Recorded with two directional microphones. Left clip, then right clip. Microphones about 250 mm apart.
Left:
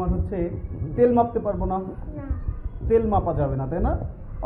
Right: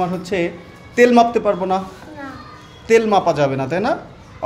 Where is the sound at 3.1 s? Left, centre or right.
Right.